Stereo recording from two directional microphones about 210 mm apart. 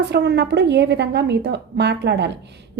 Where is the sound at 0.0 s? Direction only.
55° right (ahead or behind).